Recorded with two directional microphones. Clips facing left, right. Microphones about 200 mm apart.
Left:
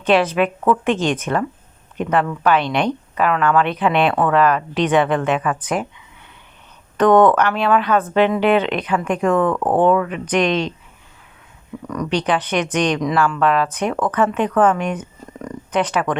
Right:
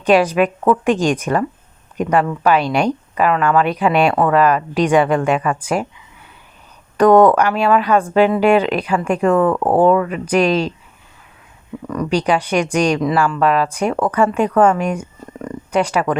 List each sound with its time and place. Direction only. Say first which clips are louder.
0.0 s speech: right 3 dB; 15° right (ahead or behind)
6.9 s speech: right 2 dB; 10° right (ahead or behind)
11.9 s speech: right 3 dB; 5° right (ahead or behind)